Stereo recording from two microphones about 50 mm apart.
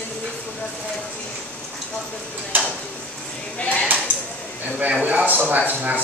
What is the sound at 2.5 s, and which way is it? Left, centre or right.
Speech, right.